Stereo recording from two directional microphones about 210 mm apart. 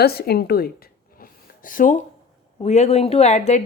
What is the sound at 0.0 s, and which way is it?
Speech, 50° left (ahead or behind).